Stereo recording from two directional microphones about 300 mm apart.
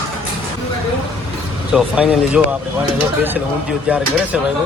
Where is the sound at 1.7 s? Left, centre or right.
Centre.